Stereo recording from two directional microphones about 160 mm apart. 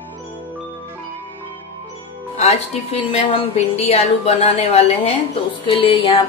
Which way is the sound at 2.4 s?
40° left (ahead or behind).